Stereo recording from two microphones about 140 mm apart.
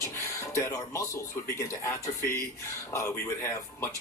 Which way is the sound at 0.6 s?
20° left (ahead or behind).